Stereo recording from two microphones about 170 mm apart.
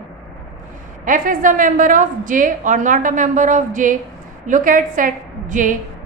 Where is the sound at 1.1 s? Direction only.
50° right (ahead or behind).